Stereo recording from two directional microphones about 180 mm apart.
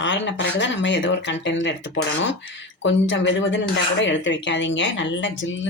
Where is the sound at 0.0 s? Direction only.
90° left.